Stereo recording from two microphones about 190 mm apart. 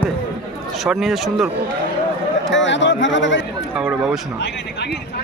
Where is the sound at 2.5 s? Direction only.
75° left (ahead or behind).